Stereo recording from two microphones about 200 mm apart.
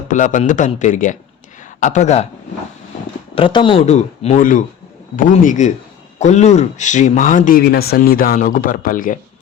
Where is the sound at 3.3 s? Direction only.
25° left (ahead or behind).